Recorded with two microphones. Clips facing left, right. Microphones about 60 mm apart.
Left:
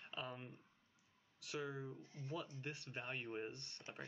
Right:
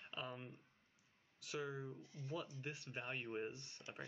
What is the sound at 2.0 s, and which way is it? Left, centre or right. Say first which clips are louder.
Speech: even; left.